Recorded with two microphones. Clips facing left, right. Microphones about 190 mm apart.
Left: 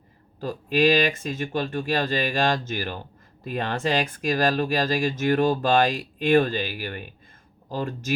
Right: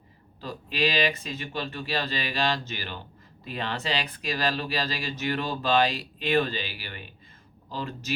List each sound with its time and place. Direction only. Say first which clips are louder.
0.3 s speech: left 7 dB; 45° left (ahead or behind)